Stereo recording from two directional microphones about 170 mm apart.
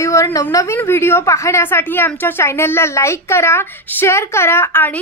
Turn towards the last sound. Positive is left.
turn(degrees=15)  # may be behind; listen again after turning